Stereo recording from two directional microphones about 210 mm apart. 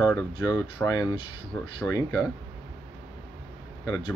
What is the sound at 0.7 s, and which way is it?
Speech, 15° left (ahead or behind).